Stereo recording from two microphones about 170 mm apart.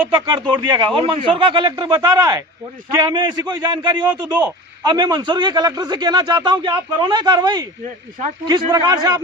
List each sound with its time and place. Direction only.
0.3 s speech: 30° right (ahead or behind)